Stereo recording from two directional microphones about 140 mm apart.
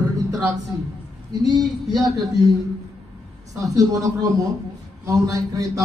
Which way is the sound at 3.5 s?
25° right (ahead or behind).